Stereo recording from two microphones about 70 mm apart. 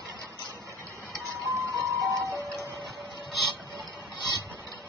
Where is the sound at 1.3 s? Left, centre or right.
Right.